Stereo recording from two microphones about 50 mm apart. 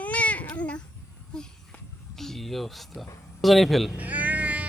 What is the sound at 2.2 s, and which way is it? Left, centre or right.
Speech, centre.